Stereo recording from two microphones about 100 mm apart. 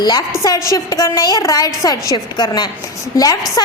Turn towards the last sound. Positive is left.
turn(degrees=35)  # may be behind; listen again after turning